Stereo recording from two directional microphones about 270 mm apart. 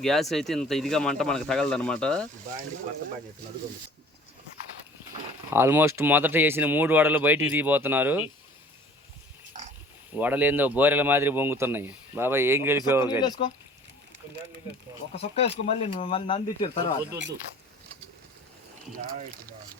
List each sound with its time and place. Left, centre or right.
0.0 s speech: centre
5.5 s speech: centre
10.2 s speech: centre
13.2 s speech: centre
15.1 s speech: left